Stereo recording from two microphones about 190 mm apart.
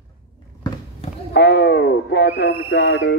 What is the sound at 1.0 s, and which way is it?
Basketball bounce, 30° left (ahead or behind).